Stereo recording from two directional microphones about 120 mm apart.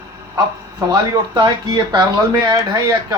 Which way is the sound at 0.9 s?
40° right (ahead or behind).